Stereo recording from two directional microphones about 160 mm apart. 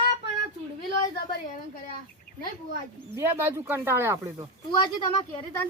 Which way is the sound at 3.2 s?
15° right (ahead or behind).